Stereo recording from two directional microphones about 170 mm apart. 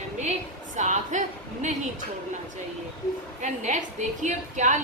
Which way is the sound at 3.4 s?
45° right (ahead or behind).